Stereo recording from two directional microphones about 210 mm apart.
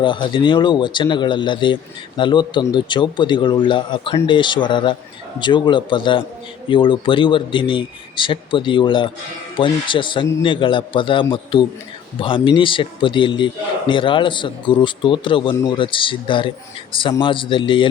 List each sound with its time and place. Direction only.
0.0 s speech: 20° left (ahead or behind)